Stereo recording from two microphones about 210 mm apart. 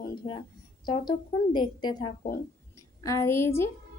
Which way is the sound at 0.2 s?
25° left (ahead or behind).